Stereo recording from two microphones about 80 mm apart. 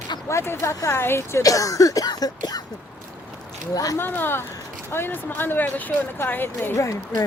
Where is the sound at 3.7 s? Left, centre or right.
Left.